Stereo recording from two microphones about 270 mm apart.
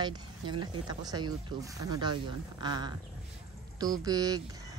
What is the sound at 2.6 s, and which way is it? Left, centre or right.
A woman's voice, centre.